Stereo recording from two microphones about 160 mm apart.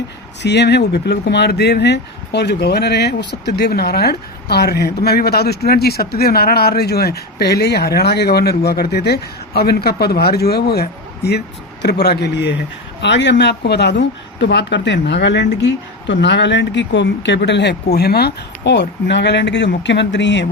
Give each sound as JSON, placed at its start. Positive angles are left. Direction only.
{"t": 0.4, "sound": "speech", "side_deg": 90}